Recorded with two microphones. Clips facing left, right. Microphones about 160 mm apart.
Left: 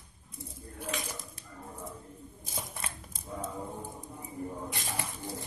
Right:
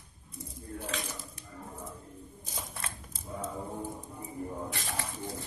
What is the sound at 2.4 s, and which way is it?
Scissors, 15° left (ahead or behind).